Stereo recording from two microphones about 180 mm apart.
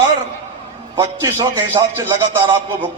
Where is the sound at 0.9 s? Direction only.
15° right (ahead or behind).